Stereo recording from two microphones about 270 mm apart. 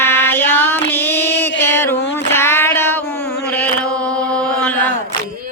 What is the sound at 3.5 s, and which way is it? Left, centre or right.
Chant, centre.